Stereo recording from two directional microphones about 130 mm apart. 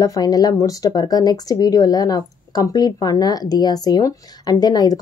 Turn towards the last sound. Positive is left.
turn(degrees=30)  # may be behind; listen again after turning